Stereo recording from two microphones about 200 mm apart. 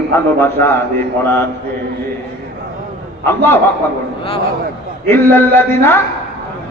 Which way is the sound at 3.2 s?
10° left (ahead or behind).